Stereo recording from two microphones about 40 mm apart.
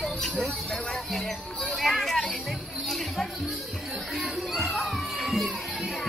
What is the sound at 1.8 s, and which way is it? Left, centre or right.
Children playing, centre.